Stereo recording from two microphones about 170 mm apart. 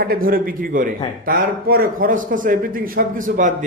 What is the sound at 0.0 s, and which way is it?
A man's voice, 60° right (ahead or behind).